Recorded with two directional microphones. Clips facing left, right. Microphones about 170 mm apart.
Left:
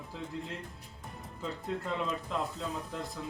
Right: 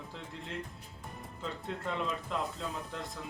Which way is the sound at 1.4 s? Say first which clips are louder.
Left 3 dB; 5° left (ahead or behind).